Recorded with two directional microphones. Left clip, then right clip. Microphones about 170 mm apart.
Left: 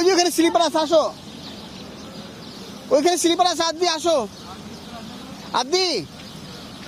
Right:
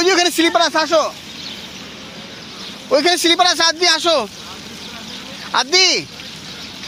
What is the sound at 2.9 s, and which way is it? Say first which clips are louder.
Speech: right 4 dB; 10° left (ahead or behind).